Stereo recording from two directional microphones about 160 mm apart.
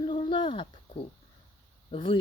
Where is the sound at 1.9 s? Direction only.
35° left (ahead or behind).